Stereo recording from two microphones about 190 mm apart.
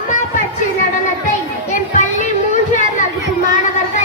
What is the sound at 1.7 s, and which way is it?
Children playing, 40° left (ahead or behind).